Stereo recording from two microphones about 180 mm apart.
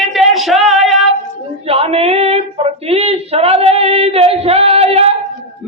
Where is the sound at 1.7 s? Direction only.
35° right (ahead or behind).